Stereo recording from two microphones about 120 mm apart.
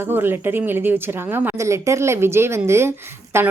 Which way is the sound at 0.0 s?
20° right (ahead or behind).